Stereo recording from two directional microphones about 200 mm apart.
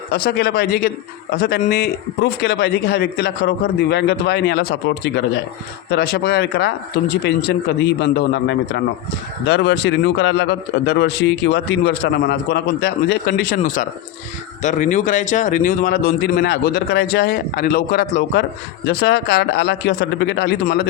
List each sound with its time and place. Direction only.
0.1 s a man's voice: 50° left (ahead or behind)